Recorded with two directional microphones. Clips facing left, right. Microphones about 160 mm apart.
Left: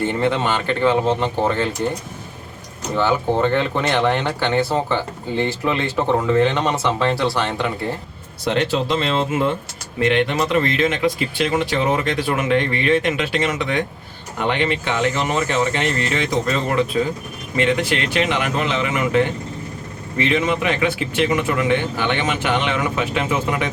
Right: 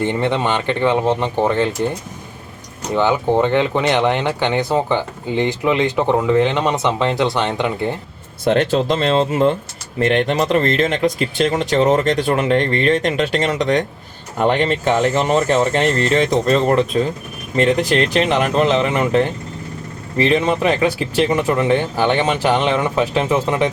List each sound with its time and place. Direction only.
0.0 s speech: 20° right (ahead or behind)
2.9 s speech: 15° right (ahead or behind)
8.4 s speech: 50° right (ahead or behind); by 23.7 s 30° right (ahead or behind)